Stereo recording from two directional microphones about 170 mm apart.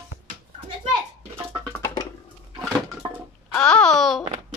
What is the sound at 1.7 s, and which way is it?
Music, 15° left (ahead or behind).